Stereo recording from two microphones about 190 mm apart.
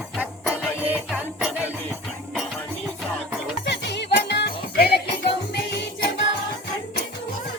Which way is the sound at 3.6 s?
65° left (ahead or behind).